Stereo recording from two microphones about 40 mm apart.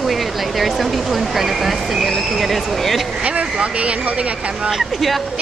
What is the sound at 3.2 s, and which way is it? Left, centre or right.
Speech, right.